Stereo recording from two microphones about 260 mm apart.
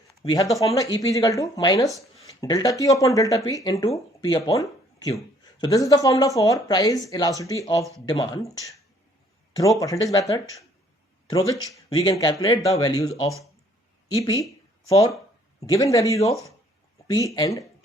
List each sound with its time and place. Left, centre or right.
0.2 s speech: centre
9.8 s speech: centre
15.6 s speech: centre